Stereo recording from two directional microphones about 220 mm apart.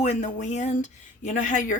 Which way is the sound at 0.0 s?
30° left (ahead or behind).